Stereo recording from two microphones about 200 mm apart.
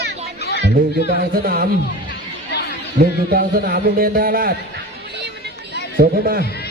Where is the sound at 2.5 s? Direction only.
55° left (ahead or behind).